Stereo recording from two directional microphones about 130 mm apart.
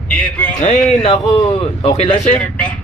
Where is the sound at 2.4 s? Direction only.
5° left (ahead or behind).